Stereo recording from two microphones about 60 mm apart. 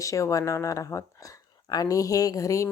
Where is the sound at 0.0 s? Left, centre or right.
Left.